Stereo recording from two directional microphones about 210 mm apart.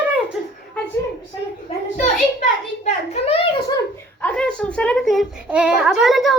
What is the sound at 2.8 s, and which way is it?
Speech, 30° left (ahead or behind).